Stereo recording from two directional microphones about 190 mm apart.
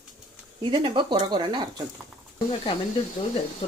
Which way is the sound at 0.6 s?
25° right (ahead or behind).